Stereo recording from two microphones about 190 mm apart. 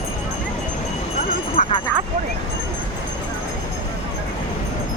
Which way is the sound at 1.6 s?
30° left (ahead or behind).